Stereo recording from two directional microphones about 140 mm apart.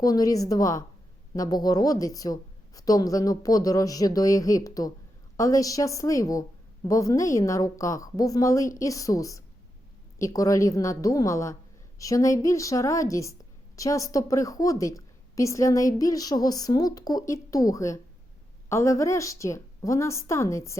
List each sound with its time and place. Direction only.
0.0 s a woman's voice: 25° left (ahead or behind)